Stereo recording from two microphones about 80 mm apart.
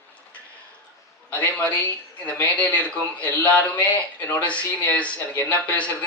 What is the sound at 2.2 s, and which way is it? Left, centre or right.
A man's voice, centre.